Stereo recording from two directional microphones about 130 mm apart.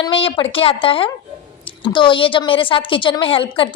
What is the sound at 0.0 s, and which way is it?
A woman's voice, 45° left (ahead or behind).